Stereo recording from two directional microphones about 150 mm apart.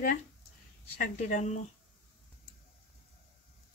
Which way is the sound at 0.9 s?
60° left (ahead or behind).